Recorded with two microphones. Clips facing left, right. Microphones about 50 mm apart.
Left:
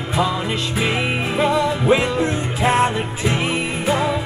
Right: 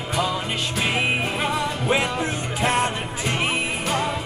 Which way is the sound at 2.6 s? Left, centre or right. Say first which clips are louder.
Left 5 dB; centre.